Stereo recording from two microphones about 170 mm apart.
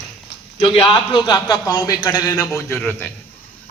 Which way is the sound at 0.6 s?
30° left (ahead or behind).